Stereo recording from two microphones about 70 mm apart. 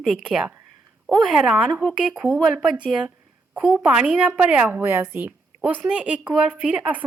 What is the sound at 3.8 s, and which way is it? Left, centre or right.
Speech, centre.